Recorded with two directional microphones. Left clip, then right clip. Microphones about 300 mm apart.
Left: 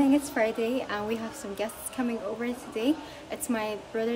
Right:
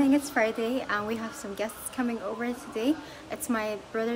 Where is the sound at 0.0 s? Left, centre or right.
Centre.